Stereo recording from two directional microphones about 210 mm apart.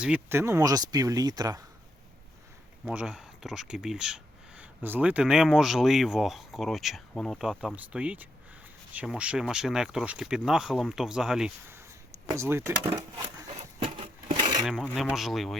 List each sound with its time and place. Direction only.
0.0 s speech: 10° right (ahead or behind)
2.8 s speech: 5° right (ahead or behind)
13.8 s a sound: 25° right (ahead or behind)
14.6 s speech: centre (ahead or behind)